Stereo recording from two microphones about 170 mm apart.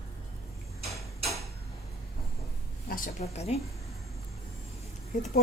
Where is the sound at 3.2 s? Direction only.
40° left (ahead or behind).